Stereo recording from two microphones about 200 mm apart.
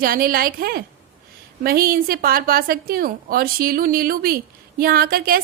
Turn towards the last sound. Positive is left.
turn(degrees=-45)  # may be behind; listen again after turning